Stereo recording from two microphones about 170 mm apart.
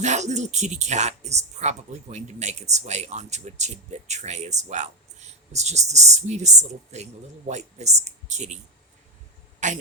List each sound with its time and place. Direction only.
0.0 s speech: 45° right (ahead or behind)
9.6 s speech: 45° right (ahead or behind)